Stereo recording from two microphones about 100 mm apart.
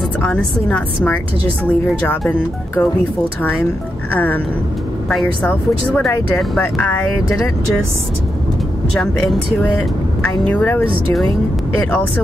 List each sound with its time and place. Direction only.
0.2 s speech: 15° left (ahead or behind)
5.2 s speech: 15° left (ahead or behind)
9.0 s speech: centre (ahead or behind)
10.4 s speech: 15° left (ahead or behind)